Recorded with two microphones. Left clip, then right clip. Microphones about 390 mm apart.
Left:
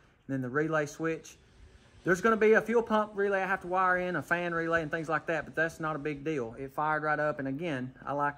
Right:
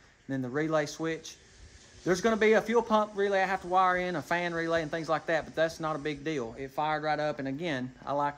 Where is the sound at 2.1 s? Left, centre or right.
Right.